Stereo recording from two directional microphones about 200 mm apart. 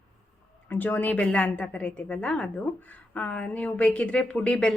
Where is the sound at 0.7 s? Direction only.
10° left (ahead or behind).